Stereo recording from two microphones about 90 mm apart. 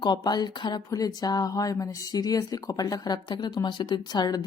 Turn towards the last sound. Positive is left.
turn(degrees=50)  # may be behind; listen again after turning